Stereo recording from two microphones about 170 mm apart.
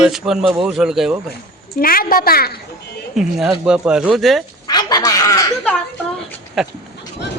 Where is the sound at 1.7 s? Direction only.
60° left (ahead or behind).